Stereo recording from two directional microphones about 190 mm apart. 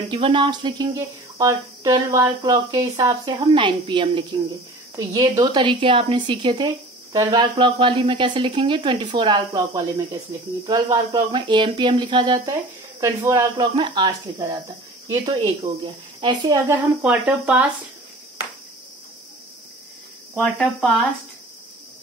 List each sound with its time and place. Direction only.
0.1 s a woman's voice: 25° right (ahead or behind)
13.7 s a woman's voice: 30° right (ahead or behind); by 17.6 s 5° right (ahead or behind)
20.3 s speech: centre (ahead or behind)